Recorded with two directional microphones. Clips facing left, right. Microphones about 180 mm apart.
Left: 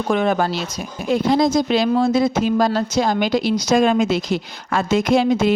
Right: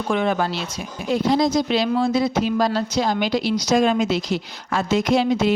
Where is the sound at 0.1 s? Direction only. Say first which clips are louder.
Left 2 dB; 45° left (ahead or behind).